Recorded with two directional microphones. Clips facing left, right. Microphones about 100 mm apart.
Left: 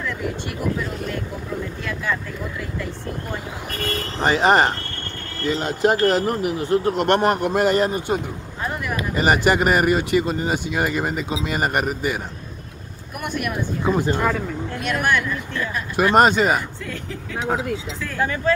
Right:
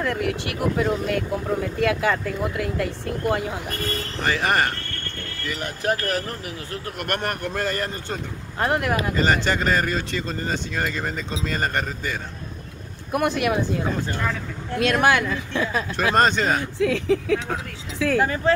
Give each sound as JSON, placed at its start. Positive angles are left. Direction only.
{"t": 0.0, "sound": "speech", "side_deg": -85}
{"t": 1.8, "sound": "speech", "side_deg": -70}
{"t": 4.2, "sound": "speech", "side_deg": 25}
{"t": 8.5, "sound": "speech", "side_deg": -85}
{"t": 9.1, "sound": "speech", "side_deg": 15}
{"t": 13.1, "sound": "speech", "side_deg": -90}
{"t": 13.9, "sound": "speech", "side_deg": 15}
{"t": 14.8, "sound": "speech", "side_deg": -90}
{"t": 16.0, "sound": "speech", "side_deg": 10}
{"t": 16.7, "sound": "speech", "side_deg": -85}
{"t": 18.2, "sound": "speech", "side_deg": -30}